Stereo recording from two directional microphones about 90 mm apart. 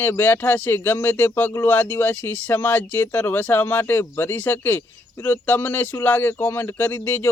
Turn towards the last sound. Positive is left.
turn(degrees=20)  # may be behind; listen again after turning